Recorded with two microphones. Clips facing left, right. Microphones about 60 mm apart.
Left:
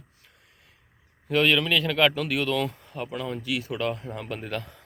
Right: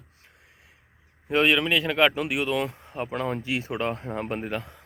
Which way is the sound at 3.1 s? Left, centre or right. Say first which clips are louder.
Right 4 dB; right.